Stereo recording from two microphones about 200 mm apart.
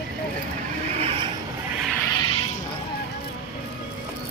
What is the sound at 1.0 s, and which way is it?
Vehicle, 30° right (ahead or behind).